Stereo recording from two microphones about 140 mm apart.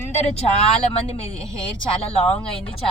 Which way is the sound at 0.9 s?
45° left (ahead or behind).